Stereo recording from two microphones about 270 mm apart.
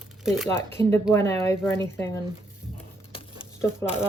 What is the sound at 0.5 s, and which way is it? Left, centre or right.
Speech, centre.